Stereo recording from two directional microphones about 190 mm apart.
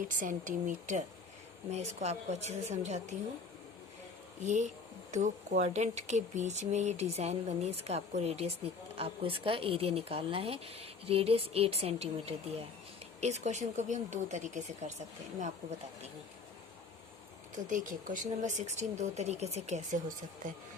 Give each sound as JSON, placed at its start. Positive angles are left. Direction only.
{"t": 0.0, "sound": "speech", "side_deg": -45}
{"t": 4.4, "sound": "speech", "side_deg": -40}
{"t": 17.5, "sound": "speech", "side_deg": -45}